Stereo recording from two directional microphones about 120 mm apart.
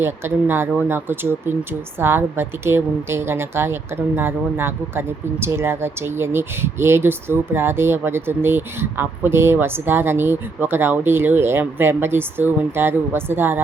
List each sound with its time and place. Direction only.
0.0 s speech: 20° right (ahead or behind)